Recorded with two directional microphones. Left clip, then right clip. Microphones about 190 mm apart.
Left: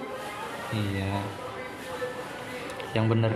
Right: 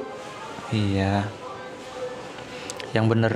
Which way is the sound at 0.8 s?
35° right (ahead or behind).